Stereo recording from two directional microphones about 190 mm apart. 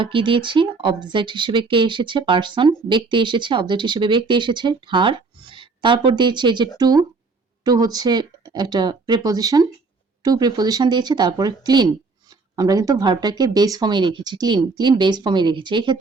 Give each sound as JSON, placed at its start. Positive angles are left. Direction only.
{"t": 0.0, "sound": "speech", "side_deg": -25}